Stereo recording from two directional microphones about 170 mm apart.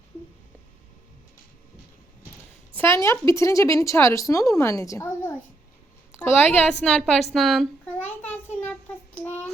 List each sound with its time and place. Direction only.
2.7 s speech: 15° left (ahead or behind)
6.4 s a woman's voice: 10° left (ahead or behind)
7.9 s a sound: 10° left (ahead or behind)
9.1 s child singing: 10° left (ahead or behind)